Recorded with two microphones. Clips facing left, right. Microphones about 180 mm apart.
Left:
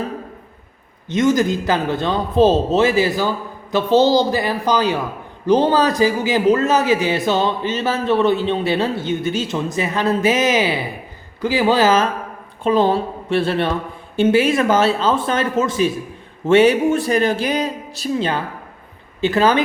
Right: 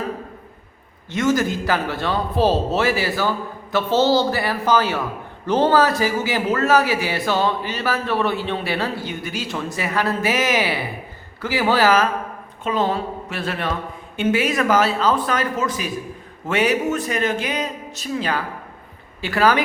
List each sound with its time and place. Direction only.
1.0 s a man's voice: 20° left (ahead or behind)